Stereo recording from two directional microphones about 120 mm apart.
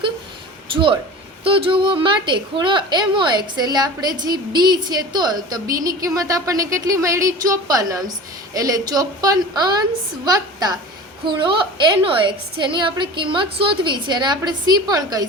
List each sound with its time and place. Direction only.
0.7 s a woman's voice: 45° right (ahead or behind)